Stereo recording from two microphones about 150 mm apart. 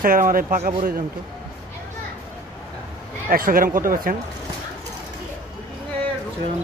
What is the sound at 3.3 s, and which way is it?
Speech, 70° right (ahead or behind).